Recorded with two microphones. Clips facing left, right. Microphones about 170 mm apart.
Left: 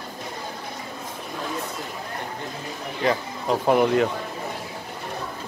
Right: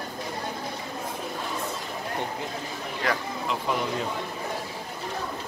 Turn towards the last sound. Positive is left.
turn(degrees=55)  # may be behind; listen again after turning